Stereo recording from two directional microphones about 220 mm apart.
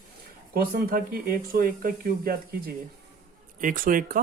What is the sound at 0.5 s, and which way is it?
Speech, 40° right (ahead or behind).